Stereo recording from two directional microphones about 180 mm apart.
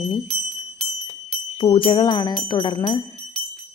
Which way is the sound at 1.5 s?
30° left (ahead or behind).